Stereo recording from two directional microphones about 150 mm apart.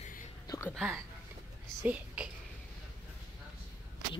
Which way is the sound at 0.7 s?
Centre (ahead or behind).